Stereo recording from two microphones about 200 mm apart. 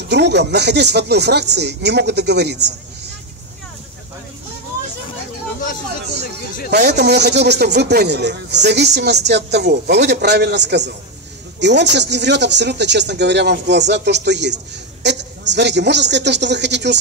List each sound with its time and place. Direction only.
0.1 s speech: 60° right (ahead or behind)
6.7 s a woman's voice: 55° right (ahead or behind)